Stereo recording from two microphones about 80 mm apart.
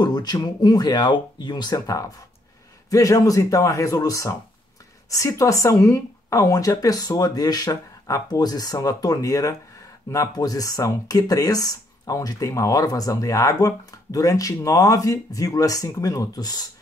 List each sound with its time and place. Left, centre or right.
0.0 s speech: left